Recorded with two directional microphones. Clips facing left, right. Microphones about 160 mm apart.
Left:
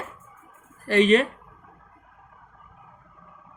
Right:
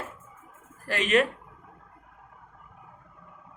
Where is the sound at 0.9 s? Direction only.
35° left (ahead or behind).